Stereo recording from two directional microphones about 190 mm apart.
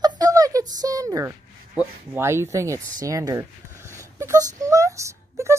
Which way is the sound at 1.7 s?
10° right (ahead or behind).